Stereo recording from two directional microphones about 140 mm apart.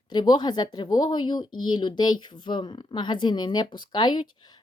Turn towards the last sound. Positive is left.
turn(degrees=30)  # may be behind; listen again after turning